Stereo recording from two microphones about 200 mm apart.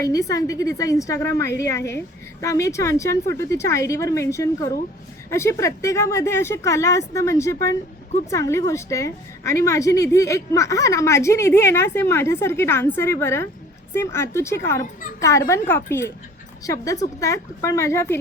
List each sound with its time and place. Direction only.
0.0 s a woman's voice: 15° left (ahead or behind)